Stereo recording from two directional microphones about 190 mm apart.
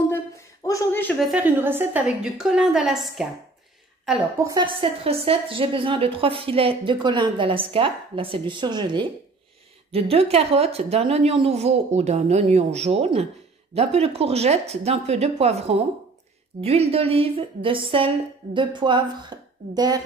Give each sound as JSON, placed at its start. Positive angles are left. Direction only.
{"t": 0.7, "sound": "speech", "side_deg": 15}
{"t": 1.3, "sound": "a woman's voice", "side_deg": -10}
{"t": 4.5, "sound": "a woman's voice", "side_deg": -25}